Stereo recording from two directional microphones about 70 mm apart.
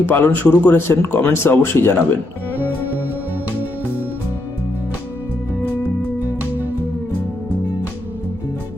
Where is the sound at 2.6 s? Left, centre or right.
Right.